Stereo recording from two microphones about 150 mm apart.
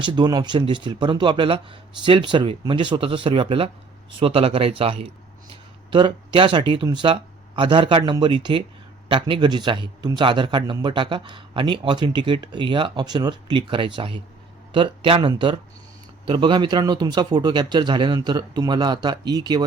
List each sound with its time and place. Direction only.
0.0 s a man's voice: 30° right (ahead or behind)